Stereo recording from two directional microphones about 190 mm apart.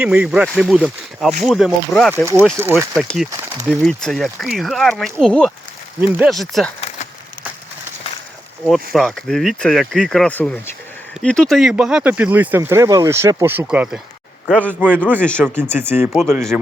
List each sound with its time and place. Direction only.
0.0 s speech: 5° right (ahead or behind)
2.1 s speech: 10° right (ahead or behind)
2.9 s speech: centre (ahead or behind)
3.3 s speech: 15° right (ahead or behind)
3.7 s speech: centre (ahead or behind)
8.6 s speech: centre (ahead or behind)
15.2 s speech: 5° left (ahead or behind)
15.7 s speech: 10° right (ahead or behind)
16.0 s speech: centre (ahead or behind)